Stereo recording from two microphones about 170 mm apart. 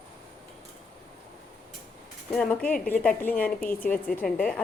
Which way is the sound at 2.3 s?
5° left (ahead or behind).